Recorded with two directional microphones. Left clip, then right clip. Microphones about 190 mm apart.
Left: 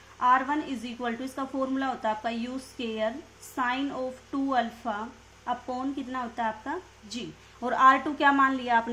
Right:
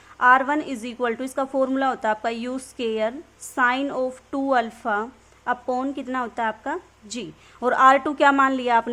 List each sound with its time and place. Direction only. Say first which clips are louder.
0.2 s speech: right 6 dB; 50° right (ahead or behind)